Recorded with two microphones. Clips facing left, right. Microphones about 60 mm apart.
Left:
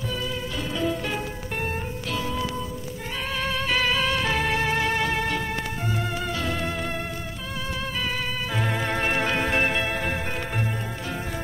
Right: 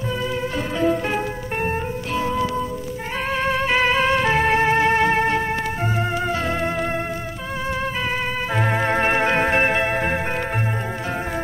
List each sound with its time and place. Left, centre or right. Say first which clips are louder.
0.7 s music: right 7 dB; right
8.5 s music: right 6 dB; right